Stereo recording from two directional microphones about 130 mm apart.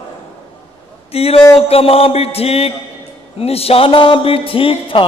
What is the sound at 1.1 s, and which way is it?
A man's voice, 50° left (ahead or behind).